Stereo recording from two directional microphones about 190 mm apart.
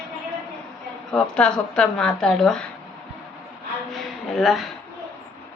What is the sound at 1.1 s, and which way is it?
A woman's voice, 5° left (ahead or behind).